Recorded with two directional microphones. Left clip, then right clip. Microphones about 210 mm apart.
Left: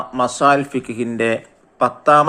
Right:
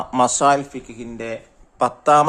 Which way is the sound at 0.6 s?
10° left (ahead or behind).